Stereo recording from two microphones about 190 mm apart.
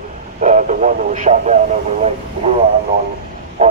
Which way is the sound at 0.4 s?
40° right (ahead or behind).